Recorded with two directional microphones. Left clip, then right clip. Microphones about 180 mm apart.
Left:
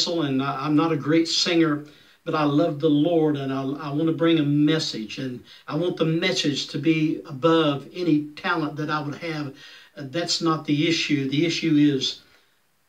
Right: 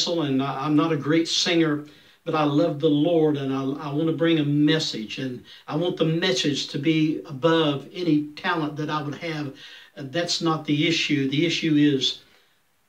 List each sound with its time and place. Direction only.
0.0 s a man's voice: centre (ahead or behind)